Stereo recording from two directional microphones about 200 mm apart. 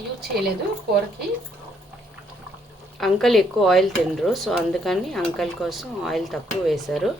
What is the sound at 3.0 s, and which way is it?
Speech, centre (ahead or behind).